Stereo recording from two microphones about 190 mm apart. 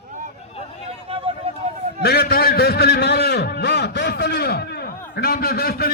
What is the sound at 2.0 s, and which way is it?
A man's voice, 55° left (ahead or behind).